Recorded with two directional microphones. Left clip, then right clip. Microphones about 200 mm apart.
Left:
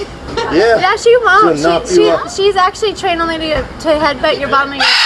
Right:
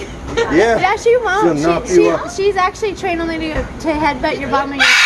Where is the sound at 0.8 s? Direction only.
Centre (ahead or behind).